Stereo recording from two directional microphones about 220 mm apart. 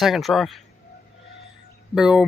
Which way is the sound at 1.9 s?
Centre (ahead or behind).